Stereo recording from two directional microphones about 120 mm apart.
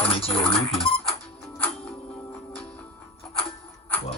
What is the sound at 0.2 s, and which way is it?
Speech, 50° left (ahead or behind).